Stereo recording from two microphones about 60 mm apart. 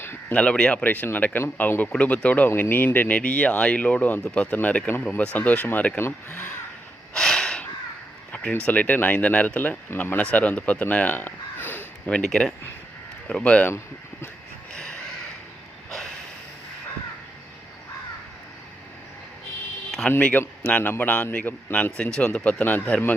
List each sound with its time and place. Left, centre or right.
0.0 s a sound: left
0.3 s speech: centre
2.6 s speech: left
6.0 s speech: left
7.1 s a sound: centre
8.6 s speech: left
13.2 s speech: centre
13.7 s speech: left
14.7 s a sound: centre
20.1 s speech: left